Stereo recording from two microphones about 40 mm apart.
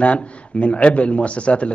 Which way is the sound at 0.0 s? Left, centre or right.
Left.